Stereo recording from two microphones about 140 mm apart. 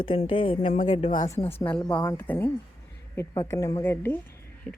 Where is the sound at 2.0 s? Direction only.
15° left (ahead or behind).